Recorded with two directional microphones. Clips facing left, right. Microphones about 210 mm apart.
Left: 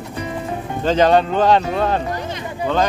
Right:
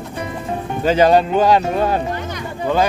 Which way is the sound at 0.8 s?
10° right (ahead or behind).